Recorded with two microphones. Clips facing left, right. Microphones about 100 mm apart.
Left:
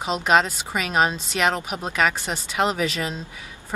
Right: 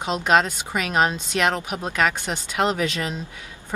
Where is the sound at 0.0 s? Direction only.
Centre (ahead or behind).